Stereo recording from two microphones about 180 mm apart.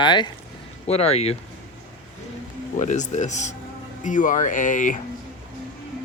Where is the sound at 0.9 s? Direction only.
35° left (ahead or behind).